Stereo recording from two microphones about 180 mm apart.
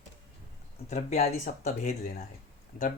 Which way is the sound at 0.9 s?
40° left (ahead or behind).